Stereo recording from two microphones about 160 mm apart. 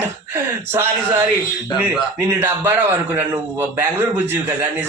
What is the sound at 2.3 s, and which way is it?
A man's voice, 15° right (ahead or behind).